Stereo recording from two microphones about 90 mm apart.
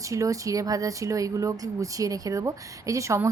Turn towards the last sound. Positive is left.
turn(degrees=-35)  # may be behind; listen again after turning